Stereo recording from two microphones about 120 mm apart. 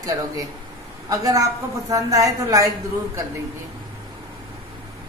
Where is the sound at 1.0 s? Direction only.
30° right (ahead or behind).